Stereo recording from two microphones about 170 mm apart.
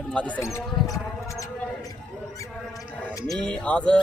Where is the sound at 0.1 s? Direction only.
10° left (ahead or behind).